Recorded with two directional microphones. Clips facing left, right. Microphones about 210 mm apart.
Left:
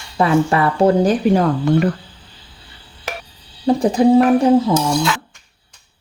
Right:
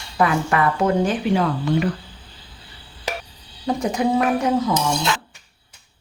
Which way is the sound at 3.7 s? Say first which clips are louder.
Left 8 dB; 30° left (ahead or behind).